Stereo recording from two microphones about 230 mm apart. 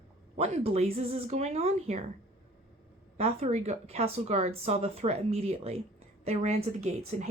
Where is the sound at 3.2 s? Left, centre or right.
Right.